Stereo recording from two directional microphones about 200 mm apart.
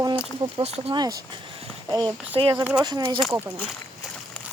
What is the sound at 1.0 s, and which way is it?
Speech, 20° right (ahead or behind).